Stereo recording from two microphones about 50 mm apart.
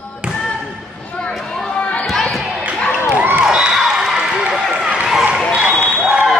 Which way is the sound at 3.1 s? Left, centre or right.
Right.